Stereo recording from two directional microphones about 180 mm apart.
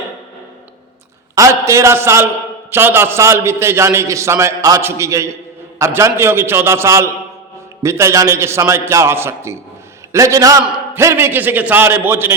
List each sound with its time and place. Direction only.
1.4 s a man's voice: 15° right (ahead or behind)